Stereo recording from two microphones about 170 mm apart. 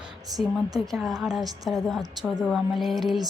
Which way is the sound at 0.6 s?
20° right (ahead or behind).